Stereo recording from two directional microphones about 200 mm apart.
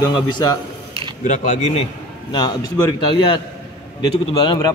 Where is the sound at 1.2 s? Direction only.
40° left (ahead or behind).